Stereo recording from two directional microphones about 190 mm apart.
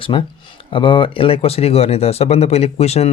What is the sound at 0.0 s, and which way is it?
Speech, 25° left (ahead or behind).